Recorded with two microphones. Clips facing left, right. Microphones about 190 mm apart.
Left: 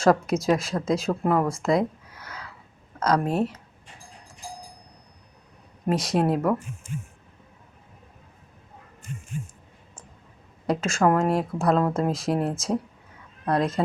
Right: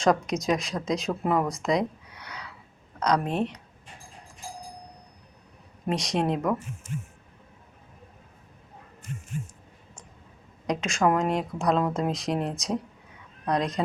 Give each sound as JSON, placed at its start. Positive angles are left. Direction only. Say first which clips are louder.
{"t": 0.0, "sound": "speech", "louder": "left 3 dB", "side_deg": 5}
{"t": 1.5, "sound": "speech", "louder": "left 3 dB", "side_deg": -15}
{"t": 1.7, "sound": "a sound", "louder": "left 2 dB", "side_deg": 5}
{"t": 3.0, "sound": "speech", "louder": "left 2 dB", "side_deg": 5}
{"t": 5.9, "sound": "speech", "louder": "left 3 dB", "side_deg": 0}
{"t": 10.7, "sound": "speech", "louder": "left 2 dB", "side_deg": 0}